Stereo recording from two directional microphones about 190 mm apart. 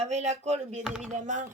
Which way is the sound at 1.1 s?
40° right (ahead or behind).